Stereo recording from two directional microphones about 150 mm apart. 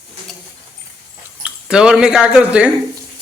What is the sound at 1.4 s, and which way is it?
Speech, 5° right (ahead or behind).